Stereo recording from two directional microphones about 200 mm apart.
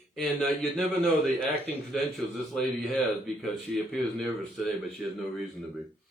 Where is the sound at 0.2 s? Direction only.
Centre (ahead or behind).